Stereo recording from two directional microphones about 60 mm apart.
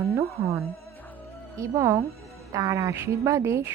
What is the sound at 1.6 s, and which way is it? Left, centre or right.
Music, right.